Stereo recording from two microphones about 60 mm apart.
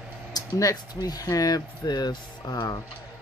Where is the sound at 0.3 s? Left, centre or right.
Left.